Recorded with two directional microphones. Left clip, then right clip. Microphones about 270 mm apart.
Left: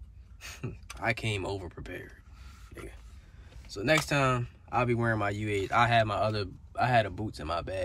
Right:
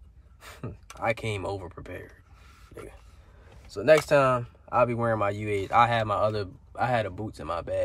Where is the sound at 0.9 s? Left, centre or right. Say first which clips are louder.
Right 3 dB; centre.